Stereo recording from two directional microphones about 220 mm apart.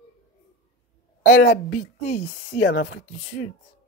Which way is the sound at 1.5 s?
30° left (ahead or behind).